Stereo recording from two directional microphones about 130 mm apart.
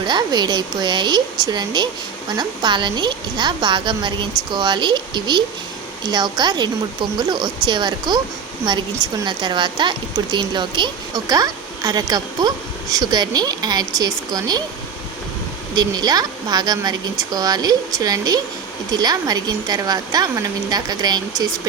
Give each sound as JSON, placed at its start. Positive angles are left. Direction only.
{"t": 0.0, "sound": "a woman's voice", "side_deg": -35}
{"t": 15.7, "sound": "a woman's voice", "side_deg": -30}